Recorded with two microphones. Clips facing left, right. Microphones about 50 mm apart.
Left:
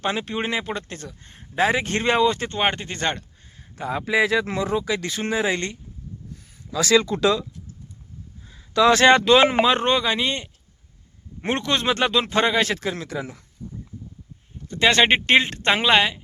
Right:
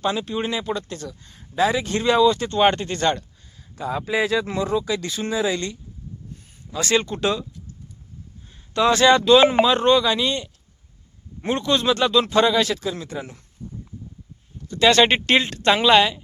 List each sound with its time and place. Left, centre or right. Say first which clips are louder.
0.0 s speech: right 1 dB; left
2.6 s speech: right 5 dB; centre
3.0 s speech: right 4 dB; left
3.8 s speech: left 1 dB; left
6.7 s speech: left 3 dB; left
8.8 s speech: left 2 dB; left
9.0 s speech: right 4 dB; left
9.6 s speech: right 2 dB; left
11.3 s speech: right 2 dB; left
13.0 s speech: left 1 dB; left
14.7 s speech: right 1 dB; left